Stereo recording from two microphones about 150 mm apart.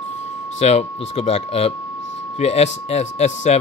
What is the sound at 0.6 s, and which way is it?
Speech, 45° left (ahead or behind).